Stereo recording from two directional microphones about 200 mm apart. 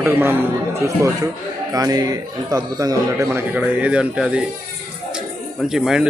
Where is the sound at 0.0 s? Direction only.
10° right (ahead or behind).